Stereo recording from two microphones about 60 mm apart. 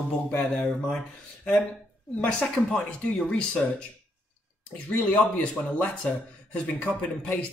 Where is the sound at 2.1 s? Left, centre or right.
Centre.